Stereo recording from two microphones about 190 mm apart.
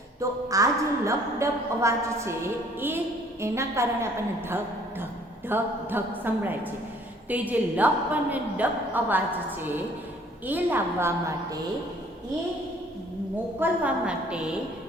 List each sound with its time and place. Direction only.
0.2 s a woman's voice: 15° right (ahead or behind)
3.4 s a woman's voice: 15° right (ahead or behind)
13.6 s a woman's voice: 5° right (ahead or behind)